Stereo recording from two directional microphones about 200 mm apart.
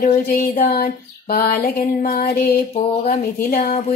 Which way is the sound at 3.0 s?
40° left (ahead or behind).